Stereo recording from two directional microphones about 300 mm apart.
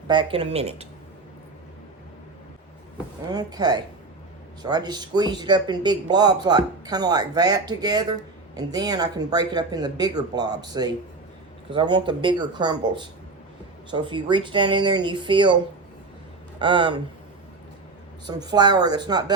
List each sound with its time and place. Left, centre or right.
0.1 s speech: centre
3.3 s speech: centre
11.7 s speech: centre
16.6 s speech: centre
18.3 s speech: centre